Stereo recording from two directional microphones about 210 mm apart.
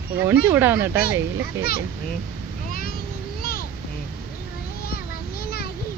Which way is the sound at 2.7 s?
45° left (ahead or behind).